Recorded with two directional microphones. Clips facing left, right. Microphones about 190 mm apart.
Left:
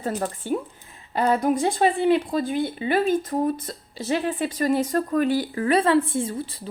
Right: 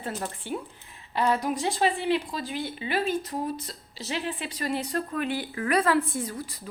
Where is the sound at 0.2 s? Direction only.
45° left (ahead or behind).